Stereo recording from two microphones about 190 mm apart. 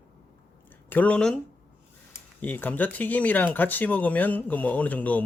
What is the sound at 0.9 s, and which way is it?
Speech, 5° left (ahead or behind).